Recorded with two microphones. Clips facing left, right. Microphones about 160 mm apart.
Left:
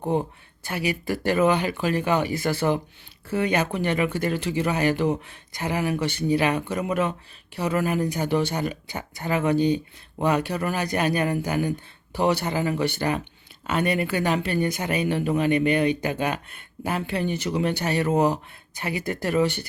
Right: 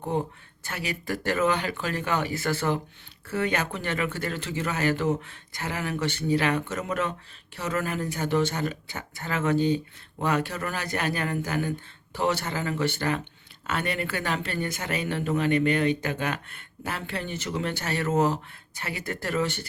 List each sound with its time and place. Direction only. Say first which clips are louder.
0.1 s speech: left 3 dB; 10° left (ahead or behind)